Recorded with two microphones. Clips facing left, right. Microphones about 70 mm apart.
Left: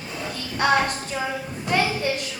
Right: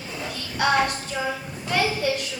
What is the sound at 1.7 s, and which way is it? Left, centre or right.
Speech, left.